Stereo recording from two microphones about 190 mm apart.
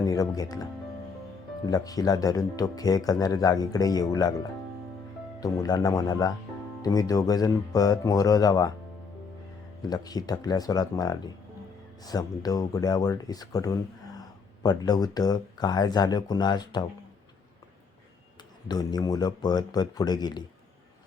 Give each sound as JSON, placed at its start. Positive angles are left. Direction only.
{"t": 0.0, "sound": "speech", "side_deg": 20}
{"t": 5.4, "sound": "speech", "side_deg": 20}
{"t": 9.8, "sound": "speech", "side_deg": 20}
{"t": 18.7, "sound": "speech", "side_deg": 20}